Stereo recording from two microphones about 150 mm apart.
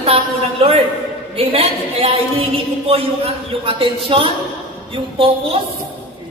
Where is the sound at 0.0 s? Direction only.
40° right (ahead or behind).